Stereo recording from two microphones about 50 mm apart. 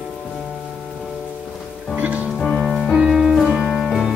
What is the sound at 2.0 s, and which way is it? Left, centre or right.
Music, right.